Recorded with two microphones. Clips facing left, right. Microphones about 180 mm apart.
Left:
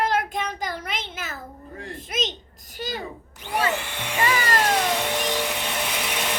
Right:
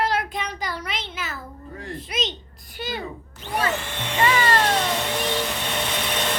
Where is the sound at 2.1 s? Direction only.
45° left (ahead or behind).